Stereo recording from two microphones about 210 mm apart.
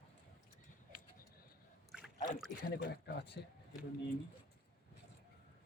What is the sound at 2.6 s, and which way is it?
Speech, 50° left (ahead or behind).